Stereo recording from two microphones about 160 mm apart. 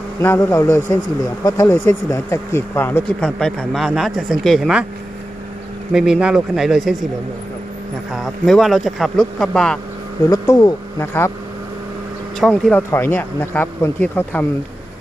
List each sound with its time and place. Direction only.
0.2 s speech: 15° left (ahead or behind); by 4.9 s centre (ahead or behind)
5.9 s speech: 5° right (ahead or behind)
8.1 s speech: centre (ahead or behind)
10.2 s speech: 20° left (ahead or behind)
12.4 s speech: 5° left (ahead or behind)
12.9 s speech: 15° left (ahead or behind)